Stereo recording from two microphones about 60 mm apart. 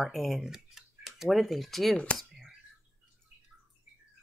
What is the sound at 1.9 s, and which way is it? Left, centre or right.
Speech, centre.